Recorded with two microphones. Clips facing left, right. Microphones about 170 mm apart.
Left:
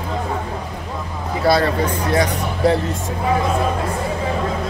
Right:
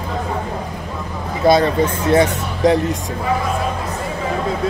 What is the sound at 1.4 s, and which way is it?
Speech, 20° right (ahead or behind).